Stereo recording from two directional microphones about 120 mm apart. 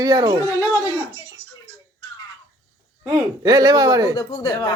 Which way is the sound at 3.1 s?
35° right (ahead or behind).